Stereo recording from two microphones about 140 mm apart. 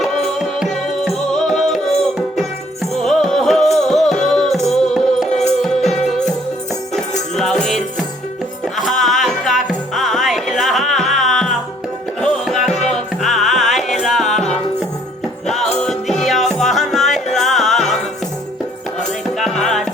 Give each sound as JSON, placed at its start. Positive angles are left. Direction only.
{"t": 0.0, "sound": "music", "side_deg": 0}
{"t": 7.3, "sound": "music", "side_deg": 0}
{"t": 19.4, "sound": "music", "side_deg": 5}